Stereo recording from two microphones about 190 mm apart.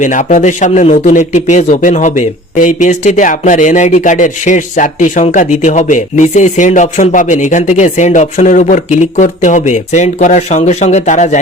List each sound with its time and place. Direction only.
0.0 s a man's voice: 40° left (ahead or behind)